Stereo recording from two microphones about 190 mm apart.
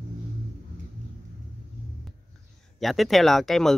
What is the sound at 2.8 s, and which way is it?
Speech, centre (ahead or behind).